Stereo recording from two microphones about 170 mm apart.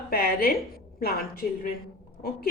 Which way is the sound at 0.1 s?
65° left (ahead or behind).